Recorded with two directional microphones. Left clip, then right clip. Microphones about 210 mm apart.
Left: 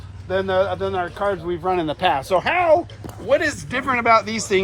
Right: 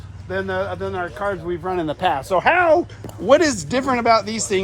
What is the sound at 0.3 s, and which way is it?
Speech, 5° right (ahead or behind).